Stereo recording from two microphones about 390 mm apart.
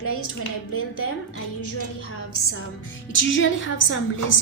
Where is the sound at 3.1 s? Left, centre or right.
Left.